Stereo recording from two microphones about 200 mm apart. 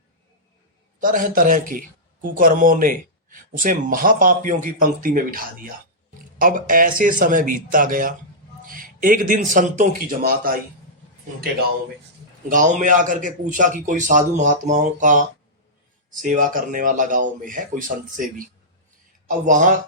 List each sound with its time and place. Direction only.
1.0 s speech: 40° right (ahead or behind)
12.5 s a man's voice: 40° right (ahead or behind)